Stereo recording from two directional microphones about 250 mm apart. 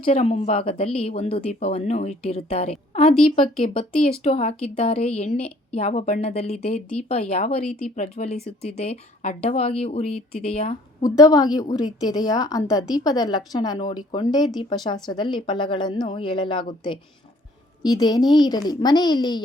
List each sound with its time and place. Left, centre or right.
0.0 s speech: left
7.6 s speech: centre
7.9 s a woman's voice: left